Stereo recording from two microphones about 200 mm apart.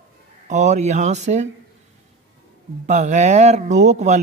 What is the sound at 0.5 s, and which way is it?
Mantra, 35° right (ahead or behind).